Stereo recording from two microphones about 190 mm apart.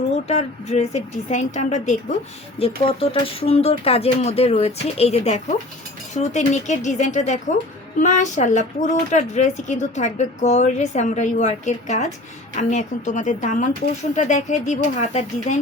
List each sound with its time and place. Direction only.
0.3 s speech: 35° left (ahead or behind)